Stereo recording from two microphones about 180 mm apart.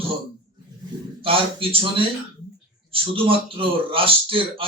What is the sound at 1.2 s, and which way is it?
A man's voice, 30° right (ahead or behind).